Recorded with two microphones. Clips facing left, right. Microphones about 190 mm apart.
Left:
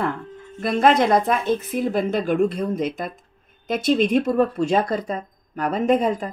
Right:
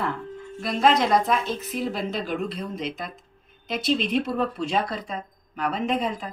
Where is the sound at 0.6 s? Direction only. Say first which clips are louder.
Left 4 dB; 55° left (ahead or behind).